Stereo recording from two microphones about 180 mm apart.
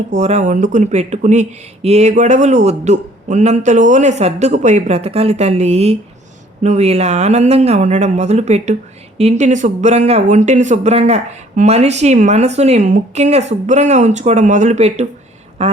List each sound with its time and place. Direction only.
0.1 s speech: 40° right (ahead or behind)